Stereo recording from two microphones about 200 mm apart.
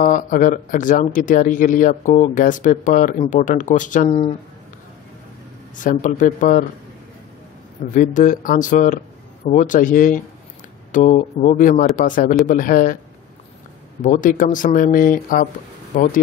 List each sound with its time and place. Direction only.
0.0 s speech: 40° left (ahead or behind)
5.9 s speech: 40° left (ahead or behind)
7.9 s a man's voice: 40° left (ahead or behind)
14.0 s speech: 40° left (ahead or behind)